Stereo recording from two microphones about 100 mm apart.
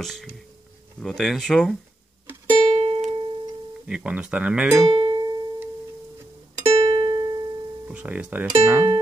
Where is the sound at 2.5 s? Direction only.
55° right (ahead or behind).